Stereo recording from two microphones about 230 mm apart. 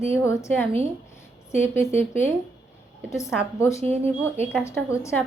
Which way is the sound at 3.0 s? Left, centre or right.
Centre.